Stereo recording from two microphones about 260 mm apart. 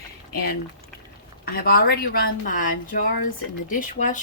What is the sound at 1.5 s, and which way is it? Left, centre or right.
Speech, left.